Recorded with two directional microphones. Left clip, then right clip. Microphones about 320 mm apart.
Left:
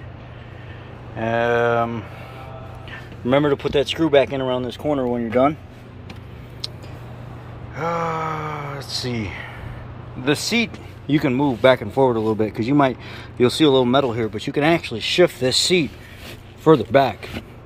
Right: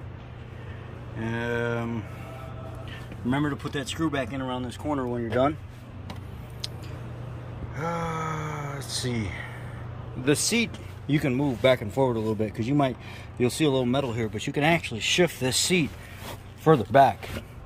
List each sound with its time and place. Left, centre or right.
1.2 s speech: centre
3.3 s speech: centre
5.1 s speech: left
7.7 s speech: centre